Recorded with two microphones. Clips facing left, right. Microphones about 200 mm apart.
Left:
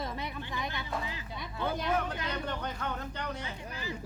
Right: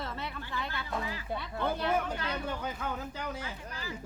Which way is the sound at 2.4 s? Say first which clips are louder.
Even; 5° right (ahead or behind).